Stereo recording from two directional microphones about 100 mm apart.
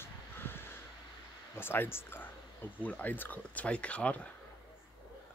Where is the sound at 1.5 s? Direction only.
20° left (ahead or behind).